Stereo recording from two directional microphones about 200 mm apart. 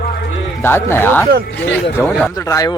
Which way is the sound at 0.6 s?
10° left (ahead or behind).